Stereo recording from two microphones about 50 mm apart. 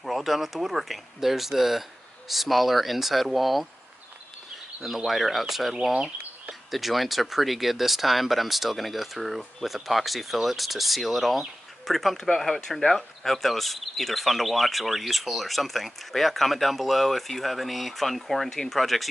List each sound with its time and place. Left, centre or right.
0.0 s speech: centre
4.8 s speech: centre
5.9 s a sound: right
6.7 s speech: centre